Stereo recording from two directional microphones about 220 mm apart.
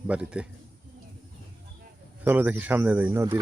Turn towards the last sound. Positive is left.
turn(degrees=-10)  # may be behind; listen again after turning